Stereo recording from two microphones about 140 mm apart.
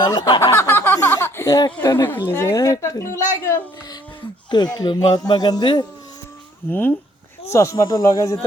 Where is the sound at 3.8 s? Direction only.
30° left (ahead or behind).